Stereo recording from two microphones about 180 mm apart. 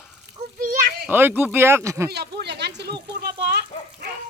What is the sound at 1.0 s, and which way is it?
Speech, 10° right (ahead or behind).